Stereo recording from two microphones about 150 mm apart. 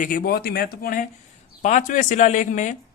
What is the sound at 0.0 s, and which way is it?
A man's voice, 70° left (ahead or behind).